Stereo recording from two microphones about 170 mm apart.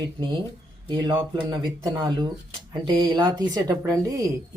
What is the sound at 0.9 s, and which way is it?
Speech, 25° right (ahead or behind).